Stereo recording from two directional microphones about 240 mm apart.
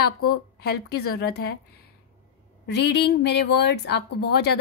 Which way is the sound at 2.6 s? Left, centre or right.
Left.